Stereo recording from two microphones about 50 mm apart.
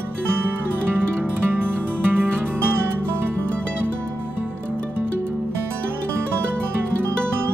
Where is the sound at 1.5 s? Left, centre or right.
Right.